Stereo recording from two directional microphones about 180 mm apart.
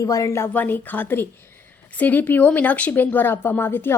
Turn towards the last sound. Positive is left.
turn(degrees=10)  # may be behind; listen again after turning